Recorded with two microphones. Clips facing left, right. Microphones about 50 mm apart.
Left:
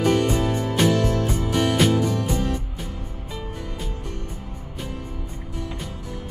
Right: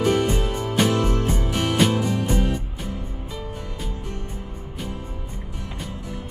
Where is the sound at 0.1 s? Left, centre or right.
Centre.